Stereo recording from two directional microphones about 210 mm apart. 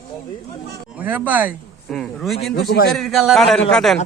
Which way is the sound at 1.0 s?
10° right (ahead or behind).